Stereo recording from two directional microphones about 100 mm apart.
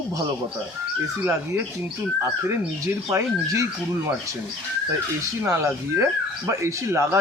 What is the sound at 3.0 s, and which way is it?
Speech, 30° right (ahead or behind).